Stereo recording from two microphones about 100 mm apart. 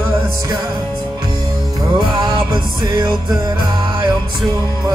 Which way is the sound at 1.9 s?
50° right (ahead or behind).